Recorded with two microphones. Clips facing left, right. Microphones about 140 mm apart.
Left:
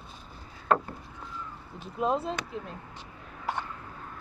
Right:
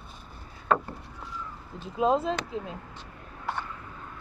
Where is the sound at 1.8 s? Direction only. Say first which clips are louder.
Right 4 dB; 90° right.